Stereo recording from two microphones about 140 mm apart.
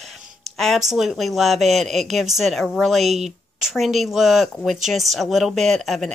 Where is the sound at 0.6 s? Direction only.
Centre (ahead or behind).